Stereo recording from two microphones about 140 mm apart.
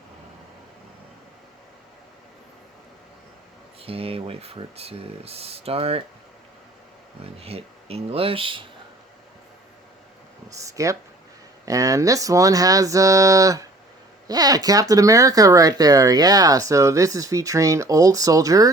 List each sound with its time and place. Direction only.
3.8 s speech: 40° right (ahead or behind)
7.3 s speech: 45° right (ahead or behind)
10.5 s speech: 25° right (ahead or behind)